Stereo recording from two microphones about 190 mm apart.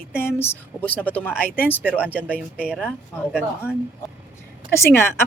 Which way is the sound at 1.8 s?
5° right (ahead or behind).